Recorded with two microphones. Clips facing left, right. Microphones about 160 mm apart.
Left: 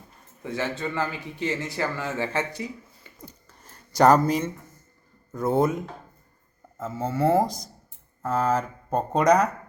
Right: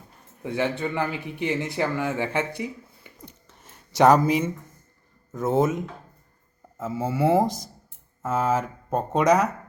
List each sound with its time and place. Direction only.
0.4 s a man's voice: 15° right (ahead or behind)
3.1 s a sound: 15° right (ahead or behind)
3.6 s speech: centre (ahead or behind)